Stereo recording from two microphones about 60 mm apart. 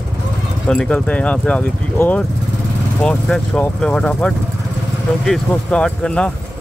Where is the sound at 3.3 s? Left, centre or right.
Left.